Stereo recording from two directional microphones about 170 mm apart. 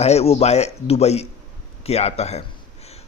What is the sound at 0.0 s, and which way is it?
A man's voice, 40° left (ahead or behind).